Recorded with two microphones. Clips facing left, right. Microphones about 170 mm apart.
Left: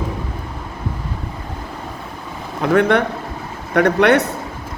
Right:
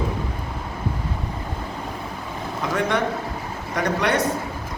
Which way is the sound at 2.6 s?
60° left (ahead or behind).